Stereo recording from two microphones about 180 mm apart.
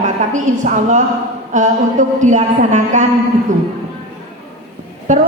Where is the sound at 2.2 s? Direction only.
45° right (ahead or behind).